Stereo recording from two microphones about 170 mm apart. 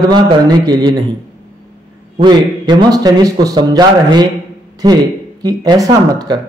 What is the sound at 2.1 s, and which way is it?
Speech, 25° right (ahead or behind).